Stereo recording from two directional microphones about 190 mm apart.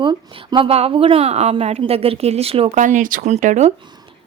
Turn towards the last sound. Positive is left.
turn(degrees=-40)  # may be behind; listen again after turning